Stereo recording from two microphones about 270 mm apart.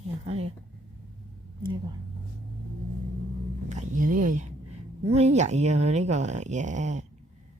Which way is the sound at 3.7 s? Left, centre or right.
Right.